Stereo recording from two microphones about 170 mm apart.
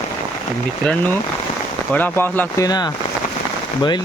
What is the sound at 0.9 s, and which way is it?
Speech, 10° left (ahead or behind).